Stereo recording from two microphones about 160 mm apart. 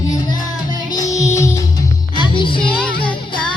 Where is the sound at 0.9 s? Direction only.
20° left (ahead or behind).